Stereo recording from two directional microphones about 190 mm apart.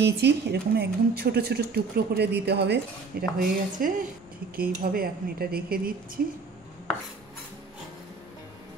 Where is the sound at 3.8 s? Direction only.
50° right (ahead or behind).